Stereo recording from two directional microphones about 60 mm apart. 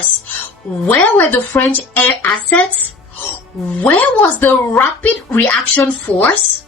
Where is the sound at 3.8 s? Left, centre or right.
Left.